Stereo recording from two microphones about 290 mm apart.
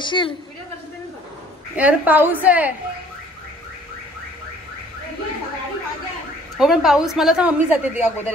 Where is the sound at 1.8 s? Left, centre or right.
Centre.